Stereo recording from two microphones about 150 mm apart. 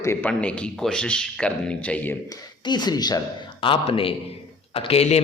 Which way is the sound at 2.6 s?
30° left (ahead or behind).